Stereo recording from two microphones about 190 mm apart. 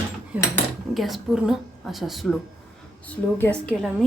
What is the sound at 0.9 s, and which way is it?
A woman's voice, centre (ahead or behind).